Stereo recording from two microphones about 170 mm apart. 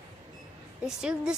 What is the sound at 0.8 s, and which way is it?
Speech, 5° right (ahead or behind).